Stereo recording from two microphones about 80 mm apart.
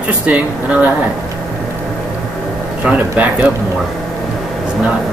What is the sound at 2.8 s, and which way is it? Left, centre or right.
Speech, centre.